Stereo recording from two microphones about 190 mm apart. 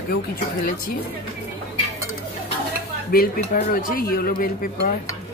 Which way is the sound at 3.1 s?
55° left (ahead or behind).